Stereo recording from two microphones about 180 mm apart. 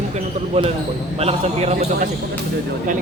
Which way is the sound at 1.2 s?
35° right (ahead or behind).